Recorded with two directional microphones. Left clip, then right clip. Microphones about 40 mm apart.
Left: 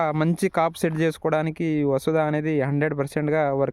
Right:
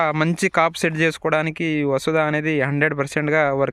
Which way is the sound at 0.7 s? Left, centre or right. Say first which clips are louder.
Right 4 dB; left.